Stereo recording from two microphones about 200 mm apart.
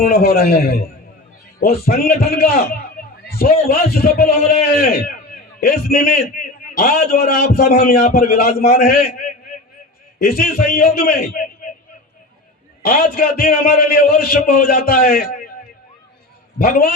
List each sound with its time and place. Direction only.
0.1 s a man's voice: 50° left (ahead or behind)
12.8 s a man's voice: 45° left (ahead or behind)
16.6 s a man's voice: 45° left (ahead or behind)